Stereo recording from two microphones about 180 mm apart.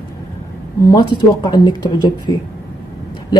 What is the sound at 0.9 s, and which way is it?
A woman's voice, 25° left (ahead or behind).